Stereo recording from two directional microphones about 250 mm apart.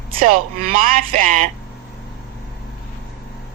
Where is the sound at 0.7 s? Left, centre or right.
Right.